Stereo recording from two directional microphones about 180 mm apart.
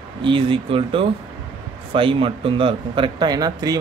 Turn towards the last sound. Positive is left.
turn(degrees=-20)  # may be behind; listen again after turning